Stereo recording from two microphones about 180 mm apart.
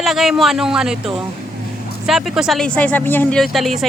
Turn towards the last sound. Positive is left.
turn(degrees=0)  # may be behind; listen again after turning